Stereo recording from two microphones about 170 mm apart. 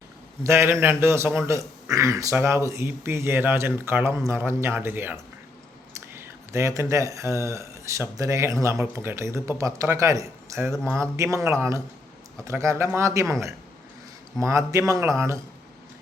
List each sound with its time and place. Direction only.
0.4 s speech: 15° right (ahead or behind)